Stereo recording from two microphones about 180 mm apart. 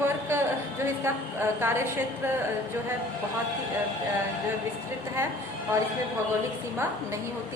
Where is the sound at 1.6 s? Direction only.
15° right (ahead or behind).